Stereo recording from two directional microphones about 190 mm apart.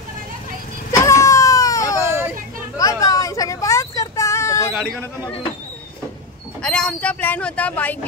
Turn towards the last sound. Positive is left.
turn(degrees=5)  # may be behind; listen again after turning